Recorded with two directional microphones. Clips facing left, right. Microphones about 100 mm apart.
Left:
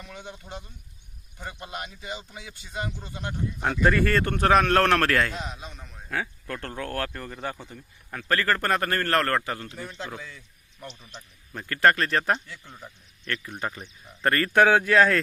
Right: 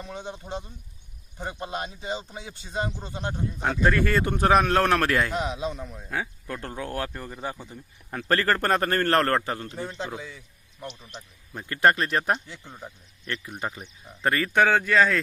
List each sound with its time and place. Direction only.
0.0 s speech: 25° right (ahead or behind)
3.8 s speech: centre (ahead or behind)
5.3 s a man's voice: 65° right (ahead or behind)
6.1 s speech: 15° right (ahead or behind)
8.1 s speech: 35° right (ahead or behind)
10.8 s speech: 5° right (ahead or behind)
11.1 s speech: 20° right (ahead or behind)
14.2 s speech: centre (ahead or behind)
14.6 s speech: 10° left (ahead or behind)